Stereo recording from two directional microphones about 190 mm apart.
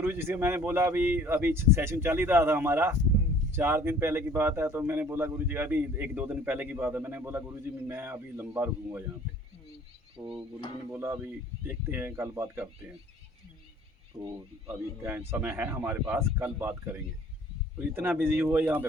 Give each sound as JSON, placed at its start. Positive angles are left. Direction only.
{"t": 0.0, "sound": "speech", "side_deg": -10}
{"t": 10.2, "sound": "speech", "side_deg": -25}
{"t": 10.9, "sound": "speech", "side_deg": -10}
{"t": 14.1, "sound": "speech", "side_deg": 0}
{"t": 15.0, "sound": "speech", "side_deg": -10}